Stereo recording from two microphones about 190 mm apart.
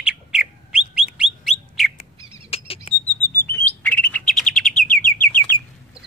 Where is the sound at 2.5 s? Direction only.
30° left (ahead or behind).